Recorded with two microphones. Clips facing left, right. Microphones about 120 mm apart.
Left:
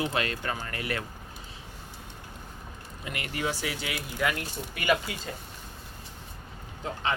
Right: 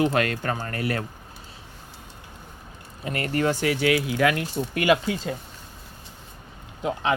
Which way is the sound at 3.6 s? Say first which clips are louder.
Right 12 dB; 65° right (ahead or behind).